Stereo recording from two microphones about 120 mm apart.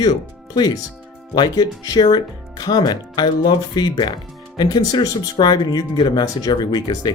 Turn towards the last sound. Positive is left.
turn(degrees=35)  # may be behind; listen again after turning